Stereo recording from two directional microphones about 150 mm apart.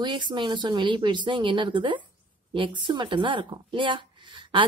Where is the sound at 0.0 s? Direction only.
30° right (ahead or behind).